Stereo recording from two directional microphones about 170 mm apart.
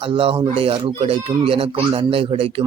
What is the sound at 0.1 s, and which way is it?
Speech, 30° right (ahead or behind).